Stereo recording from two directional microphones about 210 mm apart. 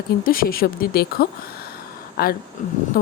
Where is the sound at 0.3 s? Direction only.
45° left (ahead or behind).